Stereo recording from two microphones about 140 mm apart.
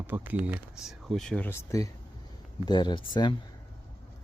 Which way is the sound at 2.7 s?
30° left (ahead or behind).